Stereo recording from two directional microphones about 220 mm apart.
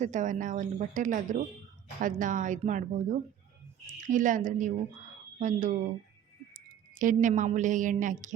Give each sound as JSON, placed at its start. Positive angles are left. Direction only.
{"t": 0.0, "sound": "speech", "side_deg": -35}
{"t": 7.0, "sound": "speech", "side_deg": -35}